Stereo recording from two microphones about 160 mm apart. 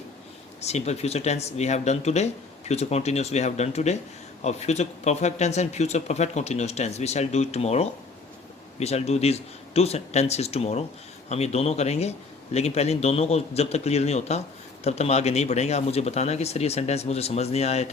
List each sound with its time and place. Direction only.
0.6 s speech: 40° left (ahead or behind)